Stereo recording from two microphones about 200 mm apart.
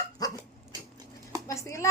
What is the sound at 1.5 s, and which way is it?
Speech, 15° left (ahead or behind).